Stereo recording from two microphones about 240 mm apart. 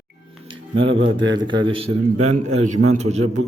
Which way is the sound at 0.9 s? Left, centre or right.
Right.